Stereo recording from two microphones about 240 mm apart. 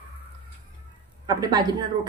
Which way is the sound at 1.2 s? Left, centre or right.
Centre.